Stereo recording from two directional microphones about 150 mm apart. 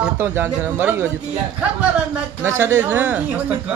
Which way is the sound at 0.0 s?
15° right (ahead or behind).